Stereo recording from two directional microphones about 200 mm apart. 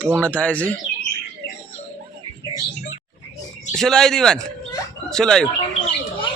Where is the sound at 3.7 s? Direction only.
Centre (ahead or behind).